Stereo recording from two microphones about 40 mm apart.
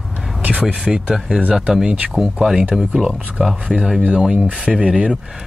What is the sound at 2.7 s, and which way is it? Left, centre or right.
Speech, centre.